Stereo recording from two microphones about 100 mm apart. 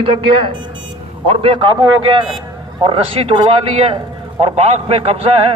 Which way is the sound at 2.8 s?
70° right (ahead or behind).